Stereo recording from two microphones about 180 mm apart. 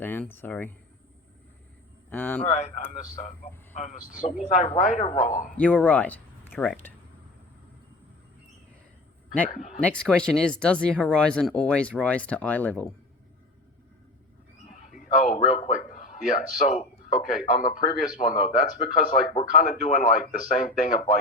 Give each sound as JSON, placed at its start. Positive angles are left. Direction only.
{"t": 0.0, "sound": "speech", "side_deg": 10}
{"t": 2.0, "sound": "speech", "side_deg": 10}
{"t": 2.4, "sound": "speech", "side_deg": 40}
{"t": 5.5, "sound": "speech", "side_deg": 5}
{"t": 9.5, "sound": "speech", "side_deg": 50}
{"t": 9.8, "sound": "speech", "side_deg": 5}
{"t": 14.7, "sound": "a sound", "side_deg": 45}
{"t": 15.6, "sound": "speech", "side_deg": 45}